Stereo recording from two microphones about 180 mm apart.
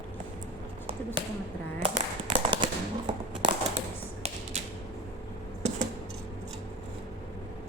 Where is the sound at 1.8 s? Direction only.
25° right (ahead or behind).